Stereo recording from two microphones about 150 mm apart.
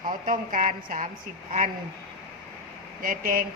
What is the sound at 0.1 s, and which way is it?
Speech, 60° right (ahead or behind).